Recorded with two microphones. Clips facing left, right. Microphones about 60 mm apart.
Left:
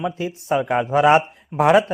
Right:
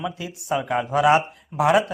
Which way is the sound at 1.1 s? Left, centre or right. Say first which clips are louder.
Left 3 dB; left.